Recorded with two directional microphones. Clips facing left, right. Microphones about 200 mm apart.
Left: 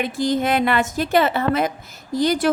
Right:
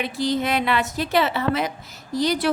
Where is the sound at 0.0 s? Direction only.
50° left (ahead or behind).